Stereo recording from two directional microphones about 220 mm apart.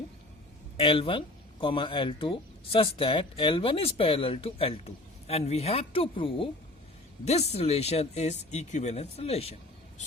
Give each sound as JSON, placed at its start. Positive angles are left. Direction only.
{"t": 0.8, "sound": "speech", "side_deg": 25}